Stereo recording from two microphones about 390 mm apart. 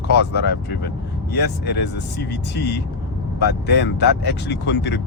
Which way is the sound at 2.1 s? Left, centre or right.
Left.